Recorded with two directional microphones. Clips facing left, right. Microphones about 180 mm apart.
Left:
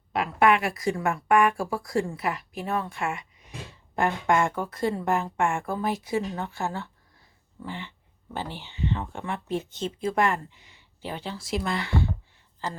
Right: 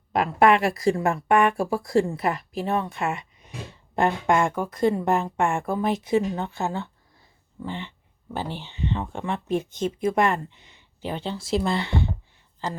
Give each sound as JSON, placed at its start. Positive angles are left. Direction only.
{"t": 0.1, "sound": "speech", "side_deg": -40}
{"t": 7.6, "sound": "a sound", "side_deg": -20}
{"t": 8.6, "sound": "speech", "side_deg": -20}